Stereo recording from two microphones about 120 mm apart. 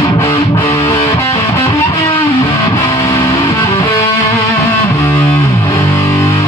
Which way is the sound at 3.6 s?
45° left (ahead or behind).